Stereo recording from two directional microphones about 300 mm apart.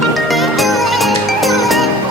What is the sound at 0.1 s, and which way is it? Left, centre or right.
Music, centre.